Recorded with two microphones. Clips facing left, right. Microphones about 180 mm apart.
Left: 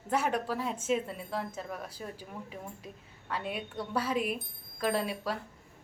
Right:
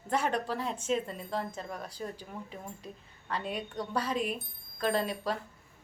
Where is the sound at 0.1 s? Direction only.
10° left (ahead or behind).